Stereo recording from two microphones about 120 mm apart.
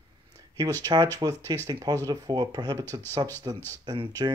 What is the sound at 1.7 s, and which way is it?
Speech, 30° right (ahead or behind).